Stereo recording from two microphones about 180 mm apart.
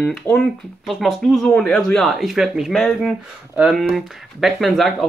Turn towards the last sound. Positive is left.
turn(degrees=0)  # may be behind; listen again after turning